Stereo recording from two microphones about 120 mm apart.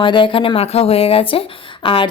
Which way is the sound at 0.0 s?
45° left (ahead or behind).